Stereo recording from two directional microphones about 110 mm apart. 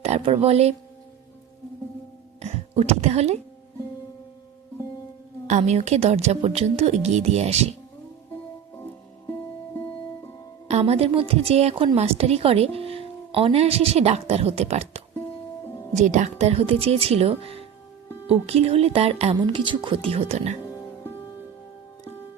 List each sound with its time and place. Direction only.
0.0 s speech: 65° right (ahead or behind)
2.4 s speech: 80° right
5.5 s speech: 90° right
10.7 s a woman's voice: 75° right (ahead or behind)
16.0 s a woman's voice: 90° right; by 19.4 s 60° right (ahead or behind)
19.4 s a woman's voice: 50° right (ahead or behind); by 20.6 s 70° right (ahead or behind)
20.6 s music: 30° left (ahead or behind)